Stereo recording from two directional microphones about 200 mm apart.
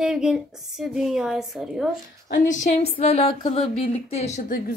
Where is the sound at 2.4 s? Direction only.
40° left (ahead or behind).